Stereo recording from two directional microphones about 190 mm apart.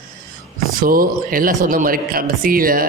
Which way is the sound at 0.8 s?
50° right (ahead or behind).